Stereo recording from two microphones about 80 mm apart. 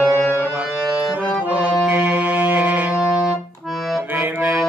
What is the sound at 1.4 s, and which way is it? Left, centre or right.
Music, centre.